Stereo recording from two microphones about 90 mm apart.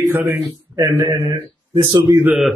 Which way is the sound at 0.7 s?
30° right (ahead or behind).